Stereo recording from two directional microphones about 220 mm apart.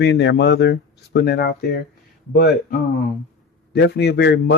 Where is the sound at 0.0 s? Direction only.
50° left (ahead or behind).